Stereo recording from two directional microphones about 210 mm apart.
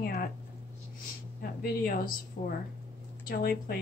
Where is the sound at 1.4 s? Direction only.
45° left (ahead or behind).